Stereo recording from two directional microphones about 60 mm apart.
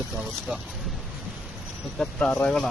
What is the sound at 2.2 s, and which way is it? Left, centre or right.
Speech, left.